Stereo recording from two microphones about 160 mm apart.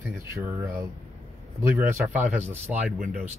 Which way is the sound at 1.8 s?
10° right (ahead or behind).